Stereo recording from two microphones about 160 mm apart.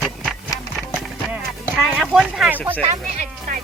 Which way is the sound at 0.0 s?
5° left (ahead or behind).